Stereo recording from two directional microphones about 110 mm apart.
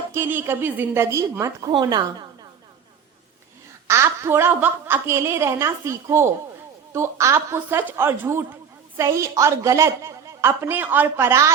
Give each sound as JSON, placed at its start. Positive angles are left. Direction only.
{"t": 0.1, "sound": "a woman's voice", "side_deg": -20}
{"t": 1.7, "sound": "a woman's voice", "side_deg": -40}
{"t": 3.8, "sound": "a woman's voice", "side_deg": -25}